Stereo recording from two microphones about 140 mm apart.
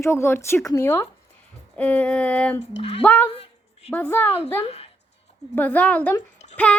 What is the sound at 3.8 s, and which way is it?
Speech, 15° left (ahead or behind).